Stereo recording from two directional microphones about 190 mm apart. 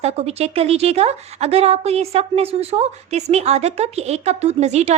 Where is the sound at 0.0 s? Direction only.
35° right (ahead or behind).